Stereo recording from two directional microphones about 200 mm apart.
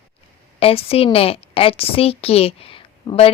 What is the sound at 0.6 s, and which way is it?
A woman's voice, 30° left (ahead or behind).